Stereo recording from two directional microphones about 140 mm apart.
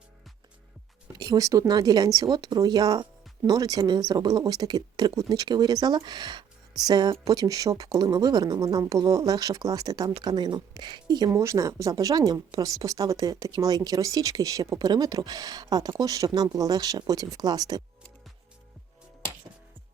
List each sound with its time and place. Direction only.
1.2 s speech: 25° right (ahead or behind)